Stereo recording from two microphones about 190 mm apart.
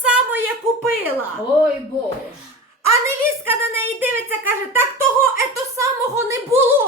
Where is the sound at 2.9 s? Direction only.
15° right (ahead or behind).